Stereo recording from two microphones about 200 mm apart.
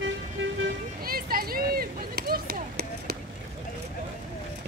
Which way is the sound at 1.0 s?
50° right (ahead or behind).